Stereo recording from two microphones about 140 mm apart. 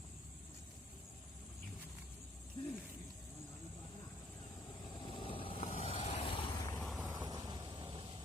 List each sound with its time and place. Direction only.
2.6 s a sound: 35° left (ahead or behind)
5.0 s vehicle: 40° left (ahead or behind)
5.6 s vehicle: 50° left (ahead or behind)
6.5 s vehicle: 20° left (ahead or behind)
6.8 s vehicle: centre (ahead or behind)
7.2 s vehicle: 25° right (ahead or behind)